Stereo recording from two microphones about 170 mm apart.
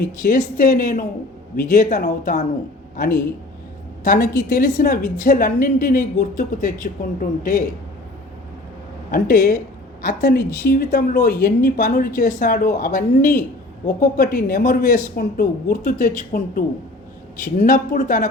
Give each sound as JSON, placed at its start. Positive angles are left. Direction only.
{"t": 0.2, "sound": "a woman's voice", "side_deg": 55}
{"t": 9.1, "sound": "a woman's voice", "side_deg": 60}